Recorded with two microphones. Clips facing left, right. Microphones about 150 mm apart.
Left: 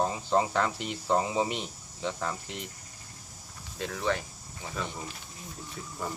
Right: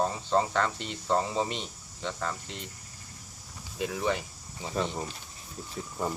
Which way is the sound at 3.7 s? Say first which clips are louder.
Right 1 dB; 10° right (ahead or behind).